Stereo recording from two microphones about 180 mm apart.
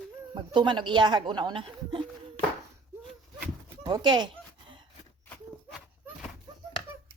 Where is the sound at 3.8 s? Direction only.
25° right (ahead or behind).